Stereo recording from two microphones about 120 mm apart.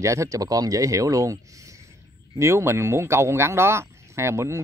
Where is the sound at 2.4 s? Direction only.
20° right (ahead or behind).